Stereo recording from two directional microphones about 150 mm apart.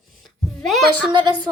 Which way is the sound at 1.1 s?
30° right (ahead or behind).